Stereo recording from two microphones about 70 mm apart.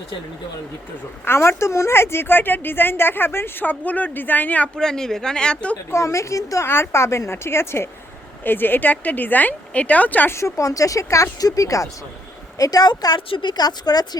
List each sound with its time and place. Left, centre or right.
1.2 s a woman's voice: left
4.8 s speech: centre
5.9 s a woman's voice: left
10.3 s speech: left
12.5 s a woman's voice: left